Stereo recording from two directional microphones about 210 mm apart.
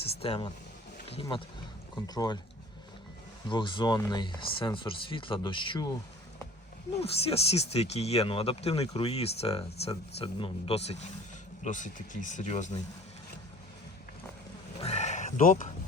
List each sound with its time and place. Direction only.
0.2 s speech: 25° left (ahead or behind)
3.5 s speech: 20° left (ahead or behind)
7.0 s speech: 30° left (ahead or behind)
14.8 s a sound: 35° left (ahead or behind)